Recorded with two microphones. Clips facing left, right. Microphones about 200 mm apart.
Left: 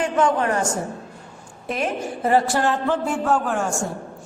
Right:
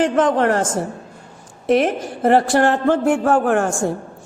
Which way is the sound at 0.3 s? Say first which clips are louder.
Right 5 dB; 90° right.